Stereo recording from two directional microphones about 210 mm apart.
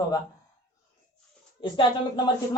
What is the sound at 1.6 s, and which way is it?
Speech, 20° left (ahead or behind).